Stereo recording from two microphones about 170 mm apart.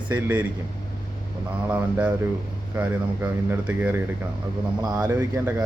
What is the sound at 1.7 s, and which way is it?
Speech, 10° right (ahead or behind).